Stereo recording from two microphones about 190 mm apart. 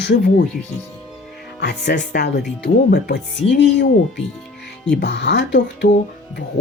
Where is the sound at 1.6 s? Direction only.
60° left (ahead or behind).